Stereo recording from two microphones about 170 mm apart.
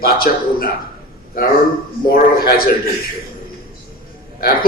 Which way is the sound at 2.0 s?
60° left (ahead or behind).